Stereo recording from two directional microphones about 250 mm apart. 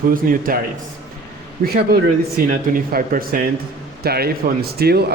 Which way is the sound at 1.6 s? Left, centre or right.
Right.